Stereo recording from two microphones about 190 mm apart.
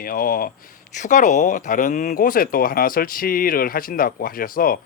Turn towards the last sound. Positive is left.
turn(degrees=50)  # may be behind; listen again after turning